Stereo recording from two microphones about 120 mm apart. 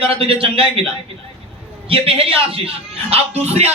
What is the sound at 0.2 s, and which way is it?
Speech, 50° right (ahead or behind).